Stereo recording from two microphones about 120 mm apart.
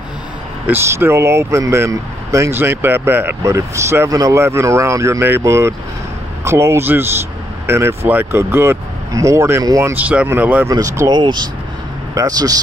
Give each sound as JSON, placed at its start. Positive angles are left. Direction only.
{"t": 0.7, "sound": "speech", "side_deg": -20}
{"t": 9.9, "sound": "speech", "side_deg": -15}
{"t": 10.7, "sound": "speech", "side_deg": -30}